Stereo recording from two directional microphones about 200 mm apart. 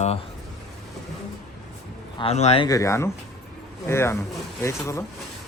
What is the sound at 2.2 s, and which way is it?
Speech, 30° left (ahead or behind).